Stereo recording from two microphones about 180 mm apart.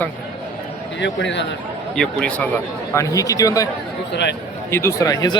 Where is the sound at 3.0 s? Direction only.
20° left (ahead or behind).